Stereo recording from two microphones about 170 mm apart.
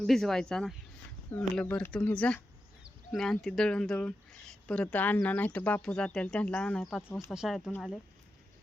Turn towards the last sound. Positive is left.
turn(degrees=0)  # may be behind; listen again after turning